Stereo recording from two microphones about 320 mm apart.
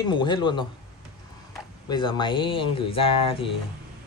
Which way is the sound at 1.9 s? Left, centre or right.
Centre.